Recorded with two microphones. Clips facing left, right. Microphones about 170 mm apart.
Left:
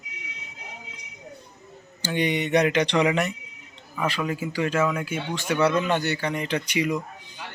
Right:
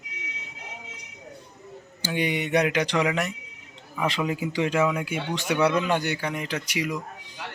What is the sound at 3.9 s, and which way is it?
A man's voice, 15° right (ahead or behind).